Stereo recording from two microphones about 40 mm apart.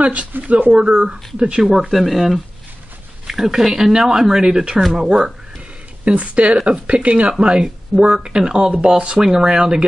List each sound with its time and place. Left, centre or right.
0.0 s speech: right
0.7 s speech: right
1.6 s speech: centre
6.0 s speech: right